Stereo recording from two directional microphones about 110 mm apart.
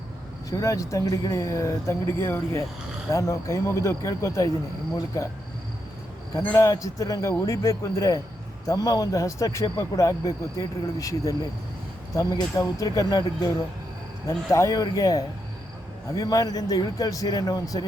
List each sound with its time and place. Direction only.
0.5 s speech: 30° left (ahead or behind)
6.6 s a man's voice: 30° left (ahead or behind)
14.3 s a man's voice: 30° left (ahead or behind)